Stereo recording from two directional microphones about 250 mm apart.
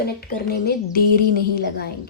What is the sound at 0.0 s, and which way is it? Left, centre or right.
Speech, left.